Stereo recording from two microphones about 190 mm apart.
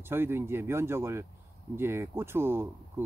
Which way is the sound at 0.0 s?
10° right (ahead or behind).